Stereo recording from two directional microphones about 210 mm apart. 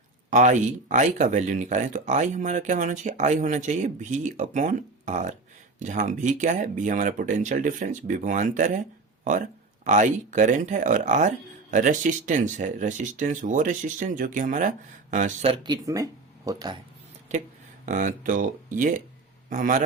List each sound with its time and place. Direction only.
0.3 s speech: 35° right (ahead or behind)
9.8 s speech: 35° right (ahead or behind); by 16.8 s 20° right (ahead or behind)
17.8 s speech: 40° right (ahead or behind)